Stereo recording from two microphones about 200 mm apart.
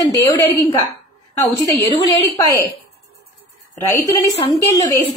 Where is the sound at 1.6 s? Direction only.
15° left (ahead or behind).